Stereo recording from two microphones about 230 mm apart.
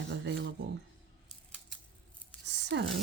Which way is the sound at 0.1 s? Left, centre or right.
Right.